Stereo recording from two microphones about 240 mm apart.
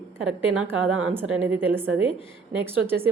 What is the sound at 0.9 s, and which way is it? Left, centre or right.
Speech, right.